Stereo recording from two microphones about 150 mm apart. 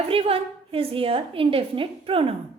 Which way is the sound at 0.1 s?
40° right (ahead or behind).